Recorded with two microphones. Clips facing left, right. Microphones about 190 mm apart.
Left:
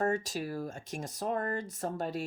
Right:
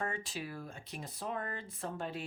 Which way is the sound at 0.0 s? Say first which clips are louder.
Left 8 dB; 40° left (ahead or behind).